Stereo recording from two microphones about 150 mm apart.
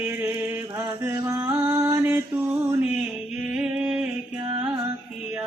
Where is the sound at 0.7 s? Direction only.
15° right (ahead or behind).